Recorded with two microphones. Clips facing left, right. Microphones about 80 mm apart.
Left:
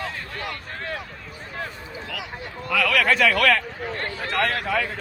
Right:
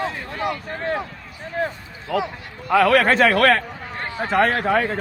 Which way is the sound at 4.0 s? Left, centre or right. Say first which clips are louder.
Right 7 dB; right.